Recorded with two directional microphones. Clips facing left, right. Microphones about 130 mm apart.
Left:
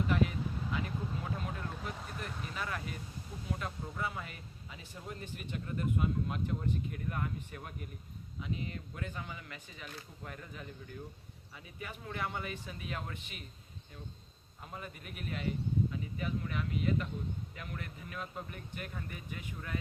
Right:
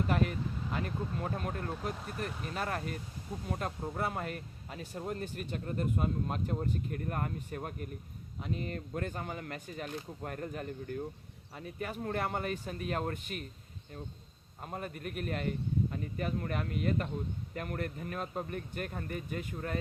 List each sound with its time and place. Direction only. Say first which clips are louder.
0.1 s speech: right 1 dB; 50° right (ahead or behind)
14.6 s speech: right 6 dB; 50° right (ahead or behind)